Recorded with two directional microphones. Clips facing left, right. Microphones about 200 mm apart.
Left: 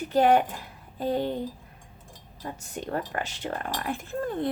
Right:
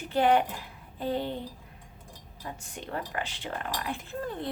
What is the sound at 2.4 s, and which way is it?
A woman's voice, 45° left (ahead or behind).